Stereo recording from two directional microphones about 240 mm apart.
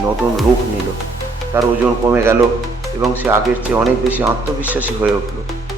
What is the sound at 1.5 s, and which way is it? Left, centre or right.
Speech, centre.